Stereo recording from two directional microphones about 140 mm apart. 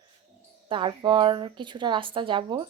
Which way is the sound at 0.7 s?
35° right (ahead or behind).